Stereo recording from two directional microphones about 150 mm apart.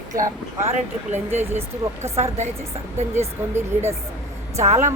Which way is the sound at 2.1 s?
45° right (ahead or behind).